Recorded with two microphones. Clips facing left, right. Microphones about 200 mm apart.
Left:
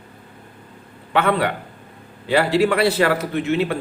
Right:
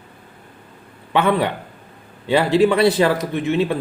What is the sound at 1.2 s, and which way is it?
Speech, 15° right (ahead or behind).